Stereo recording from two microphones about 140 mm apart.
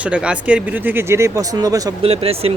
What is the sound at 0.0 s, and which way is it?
Speech, 10° right (ahead or behind).